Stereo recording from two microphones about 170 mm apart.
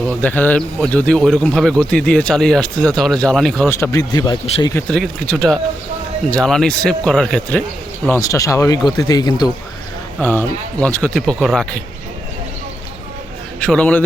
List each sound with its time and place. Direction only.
0.0 s speech: 5° left (ahead or behind)
3.7 s speech: 15° left (ahead or behind)
4.9 s speech: 5° left (ahead or behind)
8.0 s speech: 15° left (ahead or behind)
10.2 s speech: 10° left (ahead or behind)
13.6 s a man's voice: 5° left (ahead or behind)